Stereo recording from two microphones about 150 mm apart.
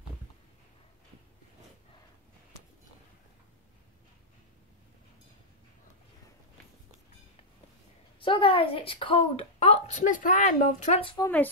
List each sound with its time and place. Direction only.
8.2 s a woman's voice: 35° left (ahead or behind); by 11.0 s 60° left (ahead or behind)
11.0 s a woman's voice: 35° left (ahead or behind)